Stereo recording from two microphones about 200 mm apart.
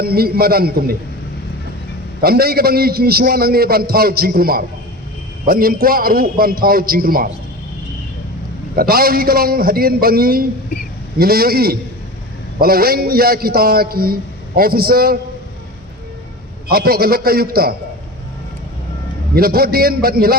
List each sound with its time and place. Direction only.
0.0 s a man's voice: 50° right (ahead or behind)
2.2 s a man's voice: 50° right (ahead or behind)
8.7 s a man's voice: 50° right (ahead or behind)
16.6 s a man's voice: 50° right (ahead or behind)
19.4 s a man's voice: 50° right (ahead or behind)